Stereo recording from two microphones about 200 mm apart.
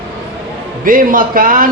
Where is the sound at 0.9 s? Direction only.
45° right (ahead or behind).